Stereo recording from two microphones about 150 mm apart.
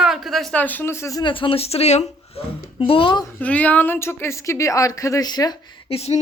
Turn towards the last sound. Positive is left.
turn(degrees=45)  # may be behind; listen again after turning